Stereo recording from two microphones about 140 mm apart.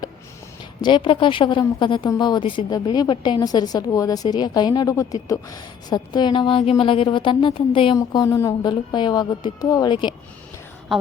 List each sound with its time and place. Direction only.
0.8 s a woman's voice: 35° left (ahead or behind)
7.9 s a woman's voice: 25° left (ahead or behind)